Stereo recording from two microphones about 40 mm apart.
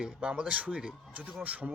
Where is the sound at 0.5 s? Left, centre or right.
Right.